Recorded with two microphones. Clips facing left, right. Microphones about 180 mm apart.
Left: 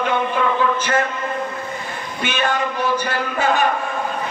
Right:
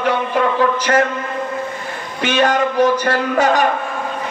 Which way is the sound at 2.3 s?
90° right.